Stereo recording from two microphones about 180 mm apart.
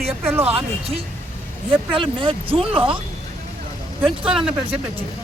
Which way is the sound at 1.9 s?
25° right (ahead or behind).